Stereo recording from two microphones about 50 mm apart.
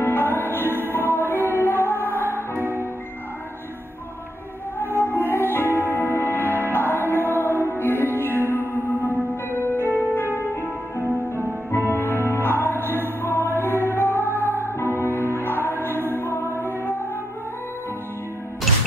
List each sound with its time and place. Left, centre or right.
0.0 s music: left
2.5 s music: right
4.7 s music: left
11.3 s music: left
16.2 s music: left